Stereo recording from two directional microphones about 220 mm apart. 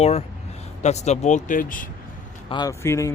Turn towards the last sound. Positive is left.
turn(degrees=10)  # may be behind; listen again after turning